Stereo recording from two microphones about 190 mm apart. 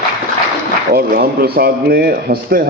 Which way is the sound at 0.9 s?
55° right (ahead or behind).